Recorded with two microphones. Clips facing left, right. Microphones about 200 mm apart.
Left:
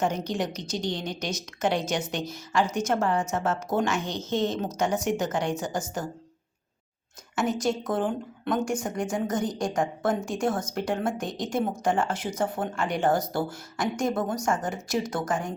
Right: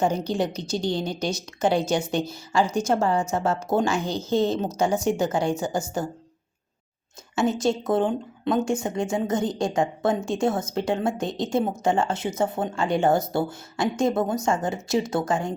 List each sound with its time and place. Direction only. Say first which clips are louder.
0.0 s a woman's voice: right 4 dB; 30° right (ahead or behind)
7.3 s a woman's voice: right 4 dB; 25° right (ahead or behind)